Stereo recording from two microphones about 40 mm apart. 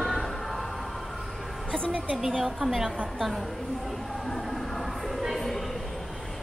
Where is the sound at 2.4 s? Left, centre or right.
Centre.